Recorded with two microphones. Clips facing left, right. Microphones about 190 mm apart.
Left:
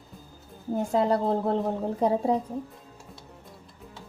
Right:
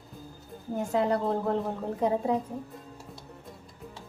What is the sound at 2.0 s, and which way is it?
Speech, 35° left (ahead or behind).